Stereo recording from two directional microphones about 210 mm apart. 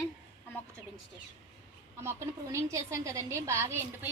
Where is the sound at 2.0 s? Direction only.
15° right (ahead or behind).